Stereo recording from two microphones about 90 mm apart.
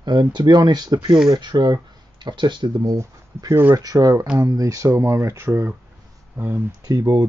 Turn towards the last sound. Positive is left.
turn(degrees=-40)  # may be behind; listen again after turning